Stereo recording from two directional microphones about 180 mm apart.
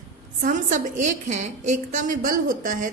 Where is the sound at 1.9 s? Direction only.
45° right (ahead or behind).